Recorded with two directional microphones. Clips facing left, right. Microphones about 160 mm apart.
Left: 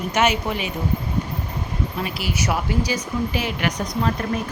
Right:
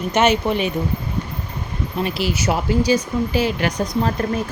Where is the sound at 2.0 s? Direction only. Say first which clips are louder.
Right 7 dB; 25° right (ahead or behind).